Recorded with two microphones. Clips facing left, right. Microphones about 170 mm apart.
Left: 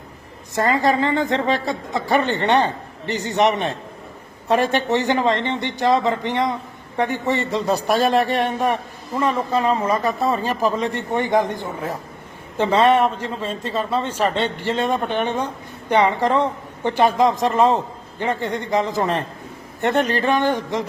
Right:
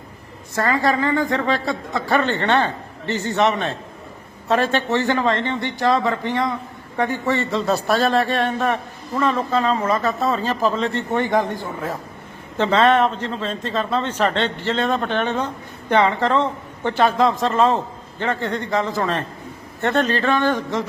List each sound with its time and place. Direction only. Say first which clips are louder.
0.5 s a man's voice: left 1 dB; 20° left (ahead or behind)